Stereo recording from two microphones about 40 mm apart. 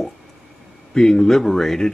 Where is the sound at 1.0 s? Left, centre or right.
Centre.